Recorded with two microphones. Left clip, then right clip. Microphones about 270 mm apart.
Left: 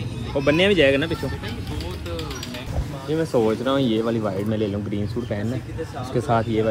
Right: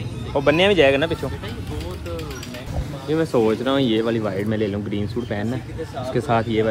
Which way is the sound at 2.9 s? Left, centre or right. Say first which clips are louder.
Right 3 dB; centre.